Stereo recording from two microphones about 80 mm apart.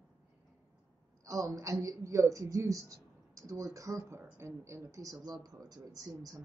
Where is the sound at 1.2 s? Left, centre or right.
Right.